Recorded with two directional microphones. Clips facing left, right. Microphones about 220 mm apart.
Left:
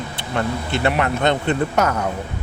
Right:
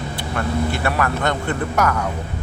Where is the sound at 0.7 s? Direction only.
20° left (ahead or behind).